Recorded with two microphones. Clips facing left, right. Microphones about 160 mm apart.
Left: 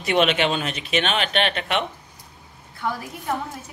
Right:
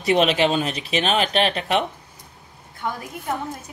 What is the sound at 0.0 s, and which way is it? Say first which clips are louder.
Speech: right 2 dB; 35° right (ahead or behind).